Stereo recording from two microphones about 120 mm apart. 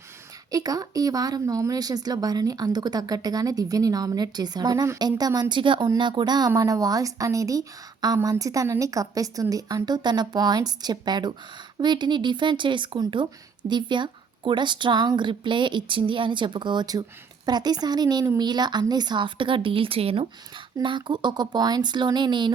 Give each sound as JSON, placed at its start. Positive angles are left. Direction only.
{"t": 0.5, "sound": "a woman's voice", "side_deg": -30}
{"t": 20.8, "sound": "a woman's voice", "side_deg": -40}